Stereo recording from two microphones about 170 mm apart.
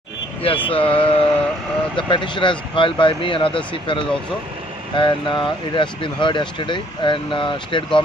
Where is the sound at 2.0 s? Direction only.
30° left (ahead or behind).